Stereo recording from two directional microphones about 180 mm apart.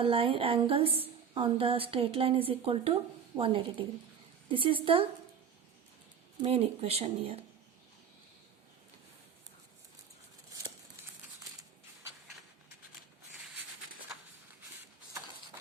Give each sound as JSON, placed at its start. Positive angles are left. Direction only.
{"t": 0.0, "sound": "a woman's voice", "side_deg": -30}
{"t": 6.4, "sound": "a woman's voice", "side_deg": -35}